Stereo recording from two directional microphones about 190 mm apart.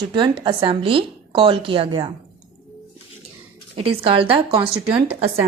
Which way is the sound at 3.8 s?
30° right (ahead or behind).